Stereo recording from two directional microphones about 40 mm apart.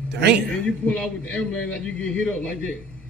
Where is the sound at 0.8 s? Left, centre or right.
Left.